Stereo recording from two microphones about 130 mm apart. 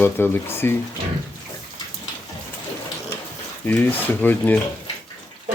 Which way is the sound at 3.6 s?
15° left (ahead or behind).